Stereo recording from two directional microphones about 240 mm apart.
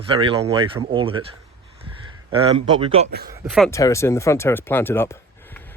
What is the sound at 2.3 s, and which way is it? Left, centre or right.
Speech, right.